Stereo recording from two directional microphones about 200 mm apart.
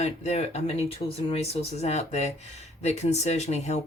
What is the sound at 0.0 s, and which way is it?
Speech, 35° left (ahead or behind).